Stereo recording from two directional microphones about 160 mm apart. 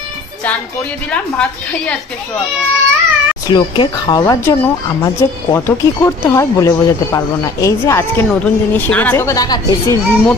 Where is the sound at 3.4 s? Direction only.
30° left (ahead or behind).